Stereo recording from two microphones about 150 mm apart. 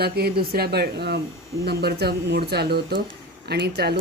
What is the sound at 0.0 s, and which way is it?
Speech, 90° right.